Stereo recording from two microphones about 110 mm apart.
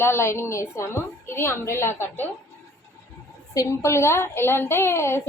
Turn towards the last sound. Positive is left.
turn(degrees=25)  # may be behind; listen again after turning